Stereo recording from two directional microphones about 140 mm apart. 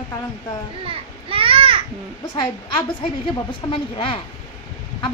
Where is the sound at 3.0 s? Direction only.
40° left (ahead or behind).